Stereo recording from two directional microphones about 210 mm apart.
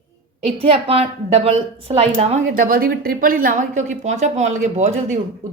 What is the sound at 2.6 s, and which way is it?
Speech, 45° right (ahead or behind).